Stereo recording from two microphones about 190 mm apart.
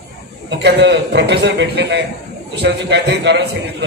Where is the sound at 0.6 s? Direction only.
65° right (ahead or behind).